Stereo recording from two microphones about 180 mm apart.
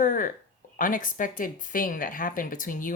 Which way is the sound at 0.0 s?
45° left (ahead or behind).